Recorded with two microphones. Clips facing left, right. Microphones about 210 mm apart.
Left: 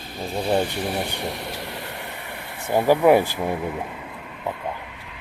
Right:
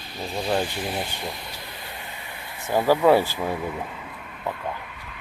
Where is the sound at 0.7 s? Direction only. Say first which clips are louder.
Left 3 dB; 65° left (ahead or behind).